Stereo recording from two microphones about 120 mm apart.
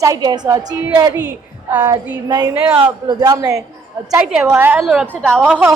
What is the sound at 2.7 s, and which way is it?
Speech, 45° right (ahead or behind).